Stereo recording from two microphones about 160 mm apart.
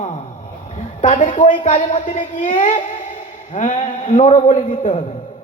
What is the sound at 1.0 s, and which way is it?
A man's voice, 45° left (ahead or behind).